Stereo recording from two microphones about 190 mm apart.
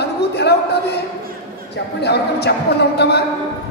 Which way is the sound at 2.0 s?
60° left (ahead or behind).